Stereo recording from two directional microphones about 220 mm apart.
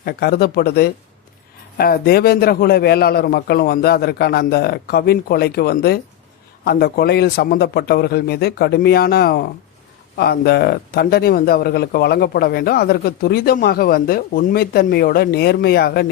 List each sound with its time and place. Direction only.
0.0 s speech: 45° left (ahead or behind)